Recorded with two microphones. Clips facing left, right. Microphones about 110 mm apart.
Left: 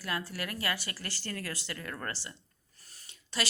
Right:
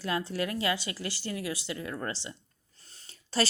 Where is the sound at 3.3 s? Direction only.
35° right (ahead or behind).